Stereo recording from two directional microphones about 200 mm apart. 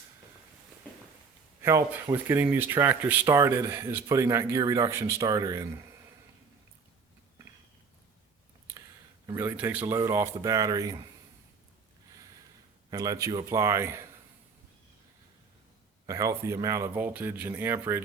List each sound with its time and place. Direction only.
1.6 s speech: 15° right (ahead or behind)
9.2 s speech: 10° right (ahead or behind)
12.9 s speech: 15° right (ahead or behind)
16.0 s speech: 15° right (ahead or behind)